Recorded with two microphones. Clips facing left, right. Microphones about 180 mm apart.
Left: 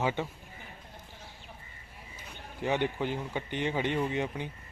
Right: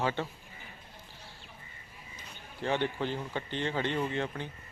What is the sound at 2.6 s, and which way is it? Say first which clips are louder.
Speech: left 1 dB; 15° left (ahead or behind).